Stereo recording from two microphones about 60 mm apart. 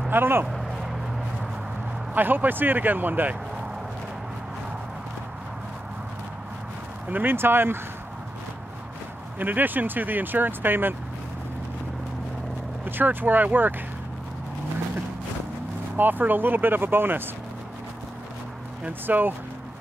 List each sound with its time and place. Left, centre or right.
0.1 s speech: right
0.5 s vehicle: centre
2.1 s speech: right
7.1 s speech: right
9.4 s speech: right
12.8 s speech: right
16.0 s speech: right
18.9 s speech: right